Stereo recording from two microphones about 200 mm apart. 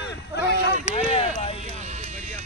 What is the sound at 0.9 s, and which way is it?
Speech, 30° left (ahead or behind).